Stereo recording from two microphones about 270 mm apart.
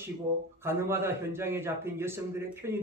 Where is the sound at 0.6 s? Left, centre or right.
Centre.